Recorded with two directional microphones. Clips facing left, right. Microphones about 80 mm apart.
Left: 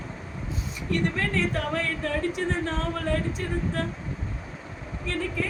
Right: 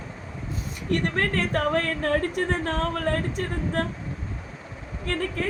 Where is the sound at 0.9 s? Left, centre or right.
Right.